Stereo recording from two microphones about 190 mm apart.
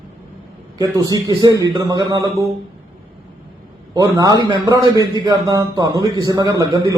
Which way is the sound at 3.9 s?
20° right (ahead or behind).